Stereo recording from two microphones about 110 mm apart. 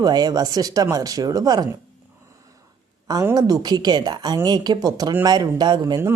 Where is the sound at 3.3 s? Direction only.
35° right (ahead or behind).